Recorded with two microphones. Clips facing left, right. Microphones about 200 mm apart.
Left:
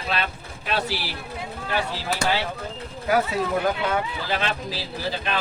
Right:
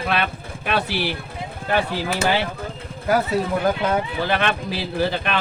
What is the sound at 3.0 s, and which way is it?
Speech, 40° right (ahead or behind).